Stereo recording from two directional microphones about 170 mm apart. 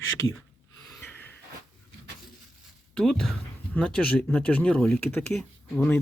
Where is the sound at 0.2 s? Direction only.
20° left (ahead or behind).